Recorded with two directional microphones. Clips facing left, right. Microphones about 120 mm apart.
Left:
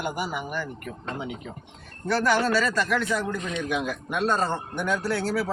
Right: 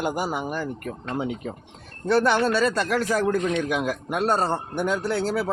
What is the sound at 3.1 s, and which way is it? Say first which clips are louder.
Speech: right 6 dB; 50° right (ahead or behind).